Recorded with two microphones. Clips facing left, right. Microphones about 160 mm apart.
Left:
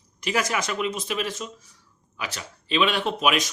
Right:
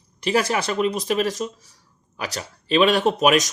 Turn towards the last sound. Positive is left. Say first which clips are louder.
# right 6 dB
turn(degrees=-40)  # may be behind; listen again after turning